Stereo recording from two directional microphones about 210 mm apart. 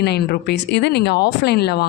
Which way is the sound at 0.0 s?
50° left (ahead or behind).